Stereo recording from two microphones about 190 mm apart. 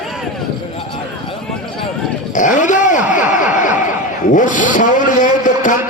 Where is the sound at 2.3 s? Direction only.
40° left (ahead or behind).